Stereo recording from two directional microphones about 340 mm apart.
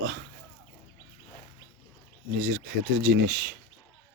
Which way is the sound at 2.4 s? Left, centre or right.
Right.